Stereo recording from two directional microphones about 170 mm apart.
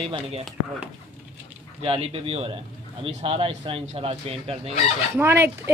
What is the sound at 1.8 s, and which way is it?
Speech, 35° right (ahead or behind).